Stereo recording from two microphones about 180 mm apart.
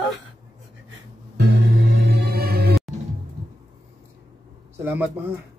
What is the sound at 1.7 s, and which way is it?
Music, 90° right.